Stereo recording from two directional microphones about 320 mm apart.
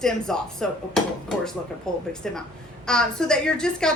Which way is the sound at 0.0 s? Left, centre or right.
Centre.